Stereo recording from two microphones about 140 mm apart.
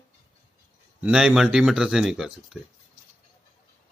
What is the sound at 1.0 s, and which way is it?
Speech, 5° right (ahead or behind).